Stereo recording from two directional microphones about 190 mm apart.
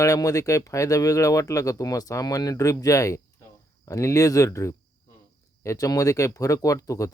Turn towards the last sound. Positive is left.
turn(degrees=15)  # may be behind; listen again after turning